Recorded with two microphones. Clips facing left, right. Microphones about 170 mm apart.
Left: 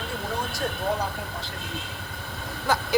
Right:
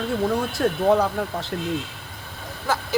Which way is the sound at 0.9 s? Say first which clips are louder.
Right 11 dB; 75° right (ahead or behind).